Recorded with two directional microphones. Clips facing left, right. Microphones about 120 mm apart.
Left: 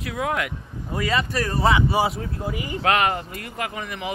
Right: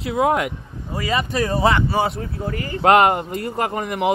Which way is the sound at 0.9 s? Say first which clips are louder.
Right 1 dB; 10° right (ahead or behind).